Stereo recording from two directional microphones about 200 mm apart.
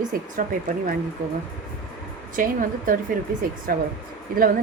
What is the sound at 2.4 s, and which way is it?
A woman's voice, 45° right (ahead or behind).